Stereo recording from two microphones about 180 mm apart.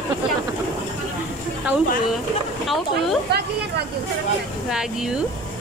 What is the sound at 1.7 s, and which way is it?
Speech, 5° right (ahead or behind).